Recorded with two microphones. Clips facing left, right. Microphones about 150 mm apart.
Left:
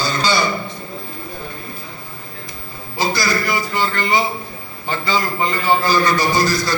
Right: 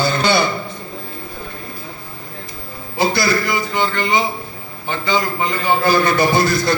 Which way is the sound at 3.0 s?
60° right (ahead or behind).